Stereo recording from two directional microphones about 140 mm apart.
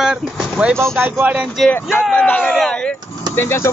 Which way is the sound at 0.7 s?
15° right (ahead or behind).